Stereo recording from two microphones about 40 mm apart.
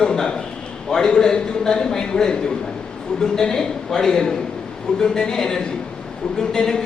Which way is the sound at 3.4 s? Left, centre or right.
Centre.